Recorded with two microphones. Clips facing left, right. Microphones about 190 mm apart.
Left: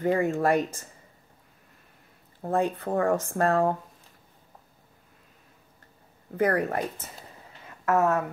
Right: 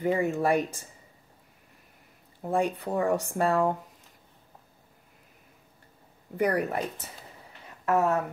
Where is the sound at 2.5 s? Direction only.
15° right (ahead or behind).